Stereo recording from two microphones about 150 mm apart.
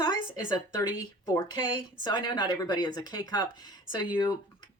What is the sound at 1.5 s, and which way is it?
Speech, 30° left (ahead or behind).